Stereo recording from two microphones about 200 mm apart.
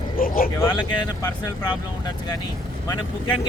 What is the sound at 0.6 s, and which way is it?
Speech, 20° left (ahead or behind).